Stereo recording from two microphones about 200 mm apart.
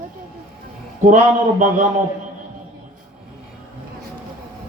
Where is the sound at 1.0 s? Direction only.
40° right (ahead or behind).